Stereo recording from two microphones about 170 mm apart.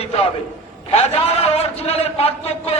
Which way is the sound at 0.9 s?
35° left (ahead or behind).